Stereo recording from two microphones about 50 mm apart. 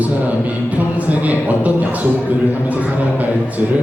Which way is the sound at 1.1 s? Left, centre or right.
Right.